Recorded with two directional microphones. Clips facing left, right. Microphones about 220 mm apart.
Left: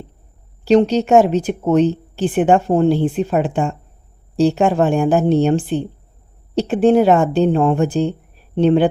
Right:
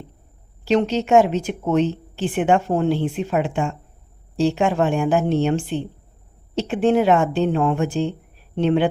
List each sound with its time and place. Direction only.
0.6 s speech: 35° left (ahead or behind)